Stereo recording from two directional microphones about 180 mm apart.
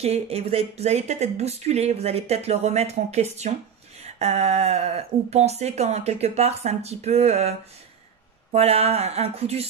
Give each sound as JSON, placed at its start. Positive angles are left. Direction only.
{"t": 0.0, "sound": "speech", "side_deg": -35}